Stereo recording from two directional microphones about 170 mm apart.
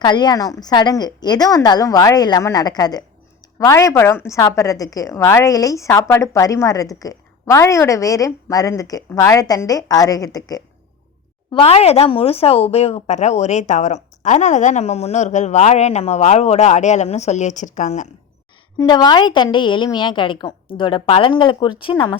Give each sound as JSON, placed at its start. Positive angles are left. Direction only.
{"t": 0.0, "sound": "a woman's voice", "side_deg": 25}
{"t": 11.5, "sound": "a woman's voice", "side_deg": 35}
{"t": 18.8, "sound": "a woman's voice", "side_deg": 25}